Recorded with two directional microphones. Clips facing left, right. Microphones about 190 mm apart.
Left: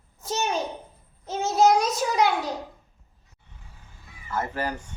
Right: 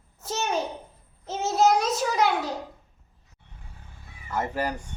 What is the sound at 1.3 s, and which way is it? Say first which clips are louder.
Child singing: left 2 dB; centre (ahead or behind).